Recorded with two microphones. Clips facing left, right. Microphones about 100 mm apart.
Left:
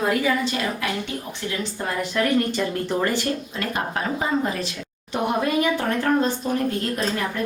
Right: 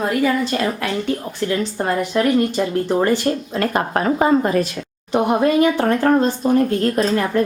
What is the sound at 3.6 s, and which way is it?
Speech, 50° right (ahead or behind).